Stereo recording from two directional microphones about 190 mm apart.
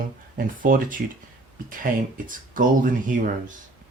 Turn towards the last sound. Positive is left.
turn(degrees=-45)  # may be behind; listen again after turning